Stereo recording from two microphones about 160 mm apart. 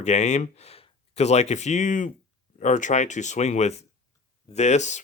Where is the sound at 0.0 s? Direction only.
45° left (ahead or behind).